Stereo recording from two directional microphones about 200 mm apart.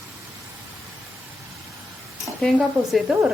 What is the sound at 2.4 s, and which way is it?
Speech, centre (ahead or behind).